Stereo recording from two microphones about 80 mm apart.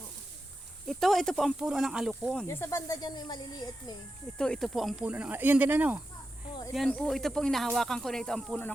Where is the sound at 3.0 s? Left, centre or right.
Left.